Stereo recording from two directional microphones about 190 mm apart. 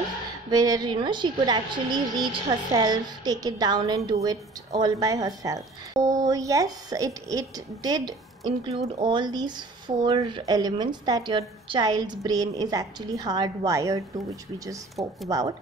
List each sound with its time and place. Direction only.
0.5 s a woman's voice: 20° right (ahead or behind)
15.2 s a woman's voice: 20° right (ahead or behind)